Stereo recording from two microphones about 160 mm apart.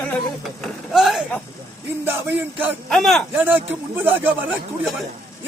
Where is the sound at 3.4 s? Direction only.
10° right (ahead or behind).